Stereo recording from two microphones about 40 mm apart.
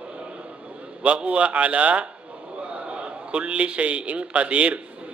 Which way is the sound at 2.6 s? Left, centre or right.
Right.